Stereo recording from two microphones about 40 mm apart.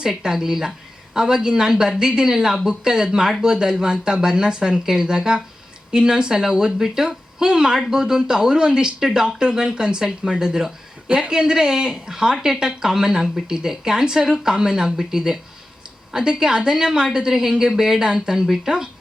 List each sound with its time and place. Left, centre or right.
0.0 s speech: centre